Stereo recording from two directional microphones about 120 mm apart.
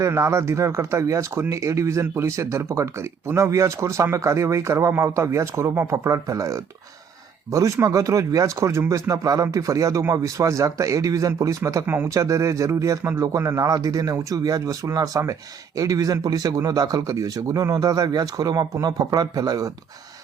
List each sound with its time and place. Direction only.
0.0 s speech: 25° right (ahead or behind)